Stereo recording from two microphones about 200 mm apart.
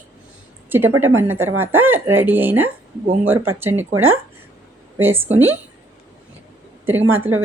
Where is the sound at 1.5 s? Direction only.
90° right.